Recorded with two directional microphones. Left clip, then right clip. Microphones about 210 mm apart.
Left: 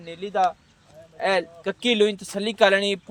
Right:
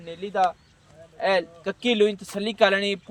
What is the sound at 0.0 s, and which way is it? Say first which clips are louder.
Speech: left 1 dB; 35° left (ahead or behind).